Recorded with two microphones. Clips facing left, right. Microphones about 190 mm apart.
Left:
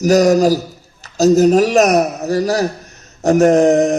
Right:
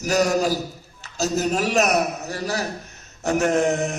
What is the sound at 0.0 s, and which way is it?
A man's voice, 40° left (ahead or behind).